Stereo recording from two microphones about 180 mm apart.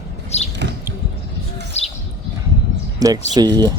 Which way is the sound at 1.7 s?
35° left (ahead or behind).